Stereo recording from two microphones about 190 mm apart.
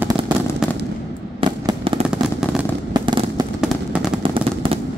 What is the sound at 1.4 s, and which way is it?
Fireworks, 25° right (ahead or behind).